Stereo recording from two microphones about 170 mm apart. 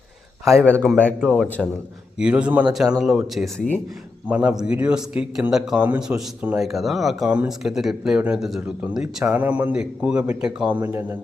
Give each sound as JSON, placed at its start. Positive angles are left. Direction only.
{"t": 0.5, "sound": "a man's voice", "side_deg": 5}
{"t": 2.1, "sound": "a man's voice", "side_deg": -5}